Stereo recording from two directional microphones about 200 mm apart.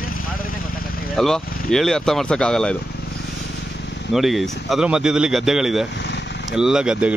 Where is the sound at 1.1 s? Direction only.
Centre (ahead or behind).